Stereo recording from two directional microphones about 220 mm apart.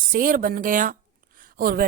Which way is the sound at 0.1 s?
40° right (ahead or behind).